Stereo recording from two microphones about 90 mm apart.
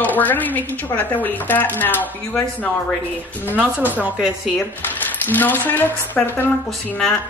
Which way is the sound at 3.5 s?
15° right (ahead or behind).